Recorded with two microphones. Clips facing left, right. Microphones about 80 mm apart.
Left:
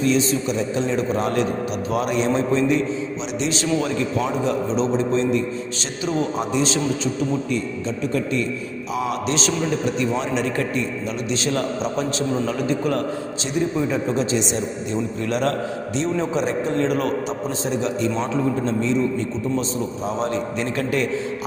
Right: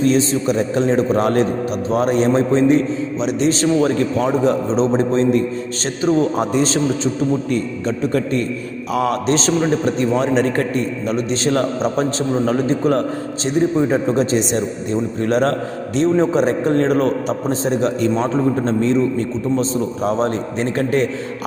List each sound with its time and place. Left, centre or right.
0.0 s a man's voice: right
20.1 s a man's voice: right